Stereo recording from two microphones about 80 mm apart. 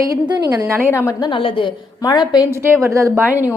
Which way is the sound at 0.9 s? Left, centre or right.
Left.